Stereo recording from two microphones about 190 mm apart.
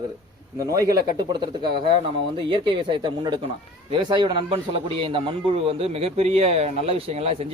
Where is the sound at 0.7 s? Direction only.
20° right (ahead or behind).